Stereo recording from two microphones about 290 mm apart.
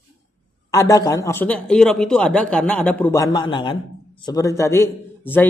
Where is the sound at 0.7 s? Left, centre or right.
Centre.